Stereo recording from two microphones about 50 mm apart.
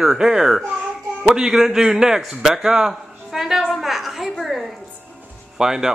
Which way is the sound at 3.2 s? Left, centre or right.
Centre.